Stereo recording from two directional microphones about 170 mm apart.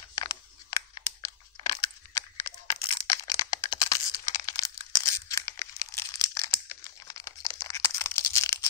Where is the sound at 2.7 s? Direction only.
35° left (ahead or behind).